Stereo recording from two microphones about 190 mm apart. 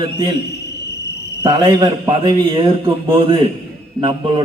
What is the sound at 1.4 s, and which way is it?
A man's voice, 25° right (ahead or behind).